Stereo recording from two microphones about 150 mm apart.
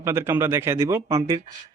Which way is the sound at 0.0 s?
15° right (ahead or behind).